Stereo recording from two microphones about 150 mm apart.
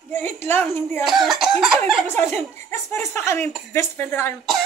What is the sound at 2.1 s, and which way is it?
Chuckle, 15° left (ahead or behind).